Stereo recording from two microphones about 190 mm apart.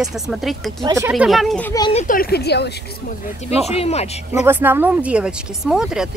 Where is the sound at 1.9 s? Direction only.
45° left (ahead or behind).